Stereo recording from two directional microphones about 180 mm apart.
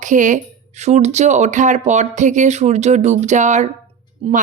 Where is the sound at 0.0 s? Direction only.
45° right (ahead or behind).